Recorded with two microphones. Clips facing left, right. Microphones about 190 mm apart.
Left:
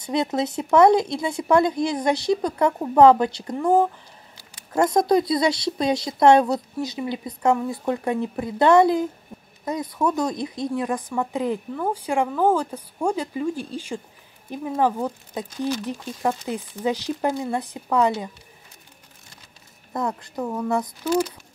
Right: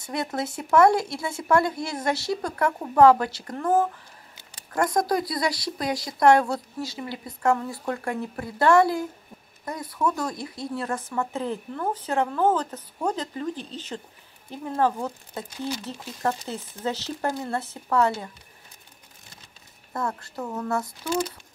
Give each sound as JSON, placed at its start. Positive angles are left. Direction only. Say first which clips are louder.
{"t": 0.0, "sound": "speech", "louder": "left 6 dB", "side_deg": 20}
{"t": 19.9, "sound": "speech", "louder": "left 3 dB", "side_deg": 20}